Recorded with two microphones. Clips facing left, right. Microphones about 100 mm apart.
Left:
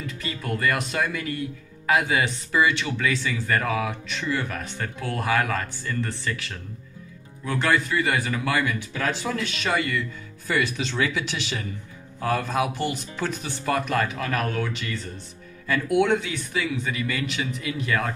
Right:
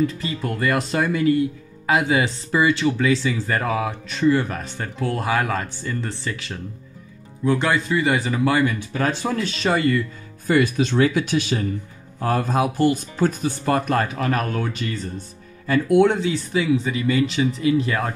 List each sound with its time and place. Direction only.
0.0 s speech: 25° right (ahead or behind)
8.6 s speech: 35° right (ahead or behind)
10.4 s speech: 50° right (ahead or behind); by 18.1 s 30° right (ahead or behind)